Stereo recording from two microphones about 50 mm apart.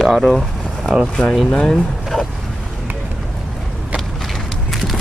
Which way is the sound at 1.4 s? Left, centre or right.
Centre.